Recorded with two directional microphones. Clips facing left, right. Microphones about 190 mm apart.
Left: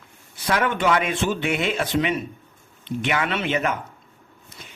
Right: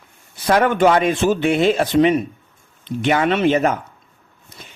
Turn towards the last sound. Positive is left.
turn(degrees=-40)  # may be behind; listen again after turning